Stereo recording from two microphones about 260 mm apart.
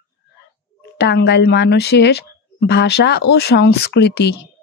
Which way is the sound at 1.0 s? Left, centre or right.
Left.